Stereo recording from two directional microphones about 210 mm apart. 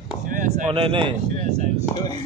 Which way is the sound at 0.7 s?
25° right (ahead or behind).